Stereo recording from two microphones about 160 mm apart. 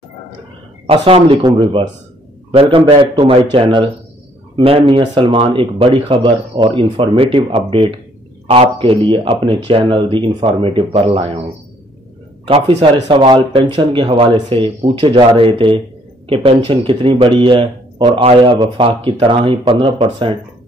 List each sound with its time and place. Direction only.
0.8 s a man's voice: 35° right (ahead or behind)
12.4 s a man's voice: 35° right (ahead or behind)